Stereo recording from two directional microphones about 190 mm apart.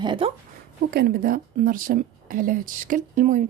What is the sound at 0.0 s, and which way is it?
Speech, 25° right (ahead or behind).